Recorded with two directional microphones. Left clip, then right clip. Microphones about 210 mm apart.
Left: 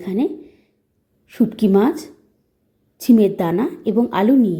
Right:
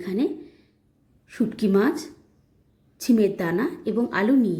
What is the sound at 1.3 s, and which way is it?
A woman's voice, 20° left (ahead or behind).